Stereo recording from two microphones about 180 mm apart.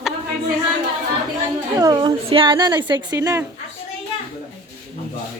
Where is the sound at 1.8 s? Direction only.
20° right (ahead or behind).